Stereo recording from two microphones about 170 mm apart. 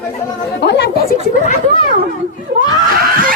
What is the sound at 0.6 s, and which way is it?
Chatter, 85° left.